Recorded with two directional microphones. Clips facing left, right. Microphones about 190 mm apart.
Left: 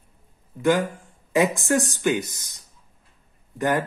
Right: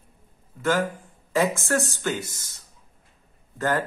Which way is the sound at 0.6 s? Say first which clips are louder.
Left 3 dB; 15° left (ahead or behind).